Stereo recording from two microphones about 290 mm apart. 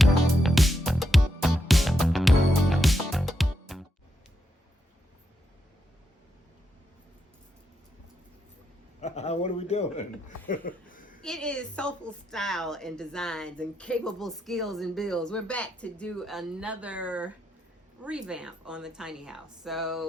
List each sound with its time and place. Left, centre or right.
0.0 s music: centre
9.0 s a sound: left
11.2 s a woman's voice: centre